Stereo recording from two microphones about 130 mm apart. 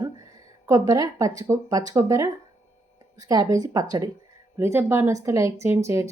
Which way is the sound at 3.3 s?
30° right (ahead or behind).